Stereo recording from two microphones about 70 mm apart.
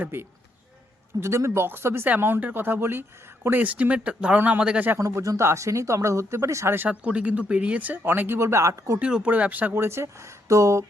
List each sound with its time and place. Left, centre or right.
0.0 s speech: right
3.6 s speech: right
4.9 s speech: right
6.7 s speech: right
8.4 s speech: right
9.0 s speech: centre
9.7 s speech: right